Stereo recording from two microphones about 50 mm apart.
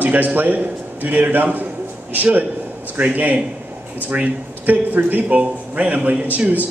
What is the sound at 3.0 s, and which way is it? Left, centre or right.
A man's voice, right.